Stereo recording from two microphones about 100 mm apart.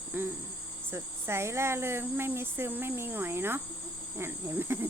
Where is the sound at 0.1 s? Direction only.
20° right (ahead or behind).